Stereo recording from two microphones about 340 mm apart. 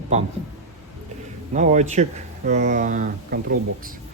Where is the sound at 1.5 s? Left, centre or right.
Right.